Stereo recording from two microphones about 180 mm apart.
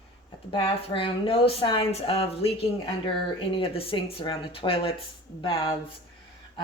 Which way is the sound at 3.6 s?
30° left (ahead or behind).